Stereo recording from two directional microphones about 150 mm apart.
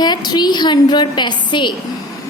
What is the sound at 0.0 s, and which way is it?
A woman's voice, 30° left (ahead or behind).